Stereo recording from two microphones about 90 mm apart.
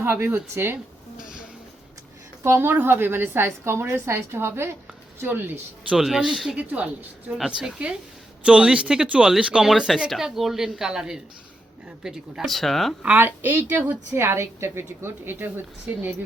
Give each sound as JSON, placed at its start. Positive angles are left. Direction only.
{"t": 0.0, "sound": "a woman's voice", "side_deg": -20}
{"t": 2.4, "sound": "a woman's voice", "side_deg": -25}
{"t": 5.9, "sound": "speech", "side_deg": -5}
{"t": 6.6, "sound": "speech", "side_deg": -15}
{"t": 13.0, "sound": "a woman's voice", "side_deg": -20}